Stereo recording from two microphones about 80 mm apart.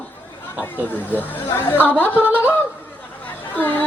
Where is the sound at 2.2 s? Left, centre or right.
Centre.